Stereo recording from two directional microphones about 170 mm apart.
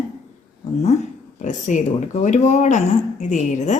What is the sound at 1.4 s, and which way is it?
Speech, 45° left (ahead or behind).